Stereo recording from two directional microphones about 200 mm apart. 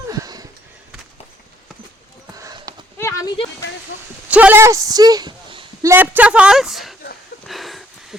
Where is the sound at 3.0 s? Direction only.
15° left (ahead or behind).